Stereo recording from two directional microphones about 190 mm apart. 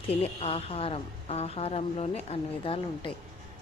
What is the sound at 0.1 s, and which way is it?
A woman's voice, 30° left (ahead or behind).